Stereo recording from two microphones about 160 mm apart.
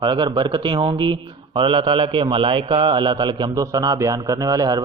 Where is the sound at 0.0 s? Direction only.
30° right (ahead or behind).